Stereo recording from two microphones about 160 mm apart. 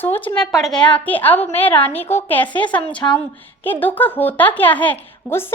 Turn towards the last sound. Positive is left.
turn(degrees=10)  # may be behind; listen again after turning